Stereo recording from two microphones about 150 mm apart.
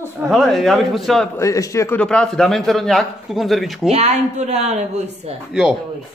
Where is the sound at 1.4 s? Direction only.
20° left (ahead or behind).